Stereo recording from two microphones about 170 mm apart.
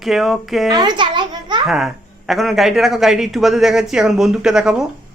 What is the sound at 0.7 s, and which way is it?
Speech, 25° right (ahead or behind).